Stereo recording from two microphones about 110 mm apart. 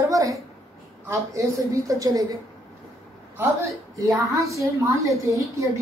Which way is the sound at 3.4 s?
30° right (ahead or behind).